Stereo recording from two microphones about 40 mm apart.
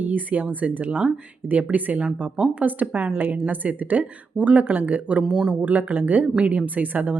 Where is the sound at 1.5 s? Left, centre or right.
Right.